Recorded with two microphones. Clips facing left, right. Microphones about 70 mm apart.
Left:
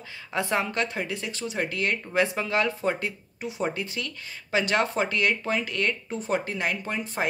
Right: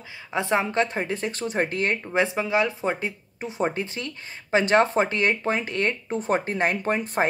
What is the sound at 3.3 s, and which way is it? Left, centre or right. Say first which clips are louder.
Speech: right 4 dB; right.